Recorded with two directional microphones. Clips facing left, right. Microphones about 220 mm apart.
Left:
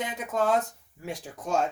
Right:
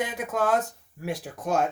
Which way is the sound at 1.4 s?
60° right (ahead or behind).